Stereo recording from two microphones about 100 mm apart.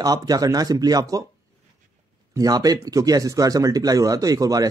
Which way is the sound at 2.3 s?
40° right (ahead or behind).